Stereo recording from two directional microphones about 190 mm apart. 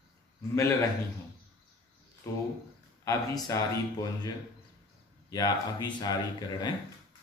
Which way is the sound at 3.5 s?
15° left (ahead or behind).